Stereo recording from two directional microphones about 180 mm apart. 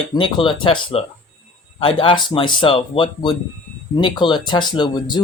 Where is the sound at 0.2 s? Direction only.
30° left (ahead or behind).